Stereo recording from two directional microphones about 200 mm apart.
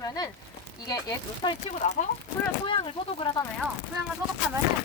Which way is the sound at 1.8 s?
35° left (ahead or behind).